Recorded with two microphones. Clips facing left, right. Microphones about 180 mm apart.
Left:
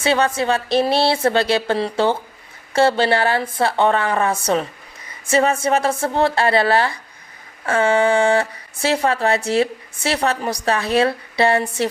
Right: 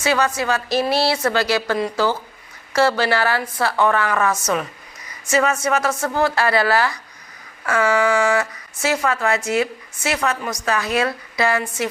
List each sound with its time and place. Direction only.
0.0 s a woman's voice: 30° left (ahead or behind)